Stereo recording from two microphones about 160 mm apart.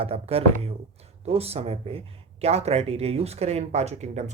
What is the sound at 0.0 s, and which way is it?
Speech, 40° right (ahead or behind).